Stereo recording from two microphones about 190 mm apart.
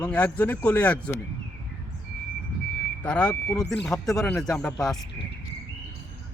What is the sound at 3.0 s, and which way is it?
Speech, 5° left (ahead or behind).